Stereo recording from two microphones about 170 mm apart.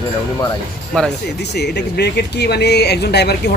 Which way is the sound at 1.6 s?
75° left (ahead or behind).